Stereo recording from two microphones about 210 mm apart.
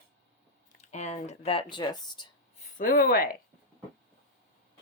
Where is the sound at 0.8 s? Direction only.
35° left (ahead or behind).